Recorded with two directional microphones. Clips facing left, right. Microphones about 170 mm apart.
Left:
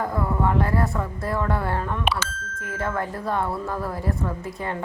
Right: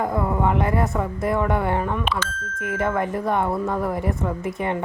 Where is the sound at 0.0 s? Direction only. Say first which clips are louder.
Right 2 dB; 20° right (ahead or behind).